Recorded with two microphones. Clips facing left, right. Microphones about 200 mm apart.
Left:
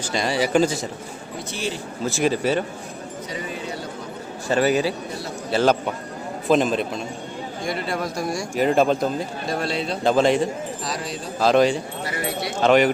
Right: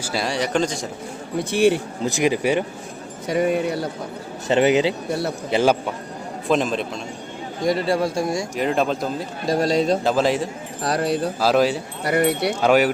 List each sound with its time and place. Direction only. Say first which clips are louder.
0.0 s speech: left 1 dB; 5° right (ahead or behind)
1.5 s speech: right 12 dB; 60° right (ahead or behind)
2.0 s speech: right 1 dB; 15° right (ahead or behind)
3.3 s speech: right 12 dB; 60° right (ahead or behind)
4.4 s speech: right 3 dB; 20° right (ahead or behind)
6.5 s speech: left 2 dB; centre (ahead or behind)
7.6 s speech: right 7 dB; 35° right (ahead or behind)
8.5 s speech: left 5 dB; centre (ahead or behind)
9.5 s a man's voice: right 8 dB; 40° right (ahead or behind)
10.0 s speech: left 2 dB; 5° right (ahead or behind)
10.8 s speech: right 8 dB; 60° right (ahead or behind)
11.3 s speech: left 3 dB; 5° right (ahead or behind)
12.0 s speech: right 12 dB; 60° right (ahead or behind)
12.6 s speech: left 1 dB; 5° right (ahead or behind)